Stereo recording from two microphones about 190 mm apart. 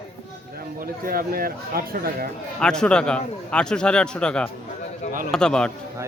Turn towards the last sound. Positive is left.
turn(degrees=5)  # may be behind; listen again after turning